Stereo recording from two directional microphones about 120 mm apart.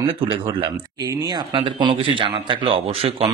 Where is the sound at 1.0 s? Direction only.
35° right (ahead or behind).